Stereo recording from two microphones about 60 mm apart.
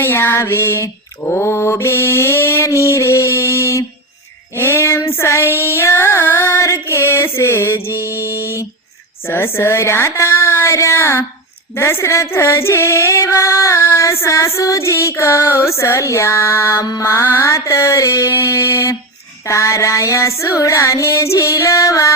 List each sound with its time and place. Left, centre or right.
0.0 s mantra: left
4.5 s child singing: left
5.5 s female singing: left
7.9 s music: right
9.2 s music: left
14.8 s child singing: left
18.3 s child singing: left